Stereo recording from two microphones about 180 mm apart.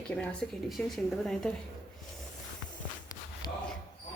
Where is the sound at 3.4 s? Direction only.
20° left (ahead or behind).